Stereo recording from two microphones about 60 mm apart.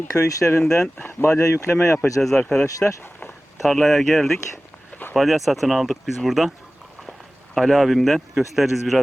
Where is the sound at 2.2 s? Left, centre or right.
Centre.